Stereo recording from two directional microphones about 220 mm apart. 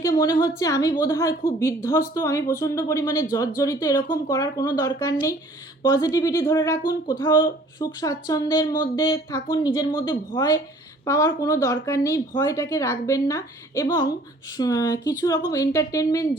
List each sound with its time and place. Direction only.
0.0 s speech: 15° left (ahead or behind)